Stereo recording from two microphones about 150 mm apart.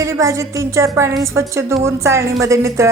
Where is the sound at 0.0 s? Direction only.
20° right (ahead or behind).